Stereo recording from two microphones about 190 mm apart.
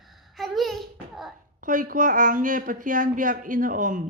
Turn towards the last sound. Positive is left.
turn(degrees=-45)  # may be behind; listen again after turning